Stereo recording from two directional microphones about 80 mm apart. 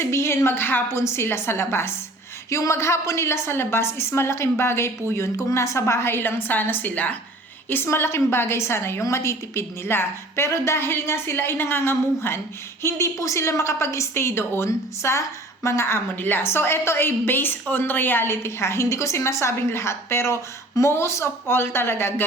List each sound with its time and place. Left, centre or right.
0.0 s a woman's voice: left